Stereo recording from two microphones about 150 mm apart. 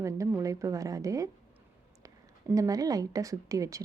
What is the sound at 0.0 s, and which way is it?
A woman's voice, 20° right (ahead or behind).